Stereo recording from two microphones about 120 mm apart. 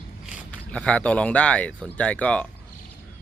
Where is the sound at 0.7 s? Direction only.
10° left (ahead or behind).